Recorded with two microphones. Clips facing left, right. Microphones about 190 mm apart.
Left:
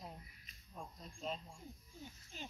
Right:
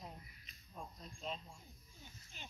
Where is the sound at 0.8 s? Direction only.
5° left (ahead or behind).